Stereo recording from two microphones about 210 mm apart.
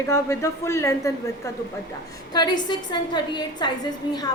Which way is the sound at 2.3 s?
20° left (ahead or behind).